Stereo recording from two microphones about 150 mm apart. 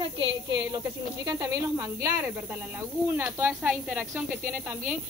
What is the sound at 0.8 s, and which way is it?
Speech, 25° right (ahead or behind).